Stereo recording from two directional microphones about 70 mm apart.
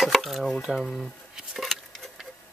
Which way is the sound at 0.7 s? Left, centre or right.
Centre.